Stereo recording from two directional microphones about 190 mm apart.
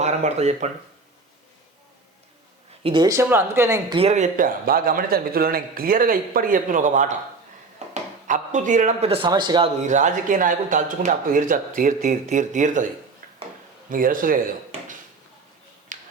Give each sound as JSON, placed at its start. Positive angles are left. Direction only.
{"t": 0.0, "sound": "speech", "side_deg": -35}
{"t": 2.8, "sound": "speech", "side_deg": -25}
{"t": 3.9, "sound": "a man's voice", "side_deg": -35}
{"t": 8.3, "sound": "a man's voice", "side_deg": -40}
{"t": 9.8, "sound": "a man's voice", "side_deg": -40}
{"t": 13.9, "sound": "a man's voice", "side_deg": -45}
{"t": 15.9, "sound": "finger snapping", "side_deg": -45}